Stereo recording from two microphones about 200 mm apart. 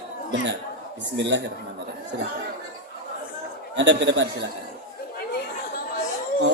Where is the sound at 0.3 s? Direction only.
65° right (ahead or behind).